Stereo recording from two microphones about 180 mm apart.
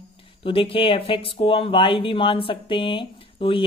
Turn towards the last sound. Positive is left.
turn(degrees=30)  # may be behind; listen again after turning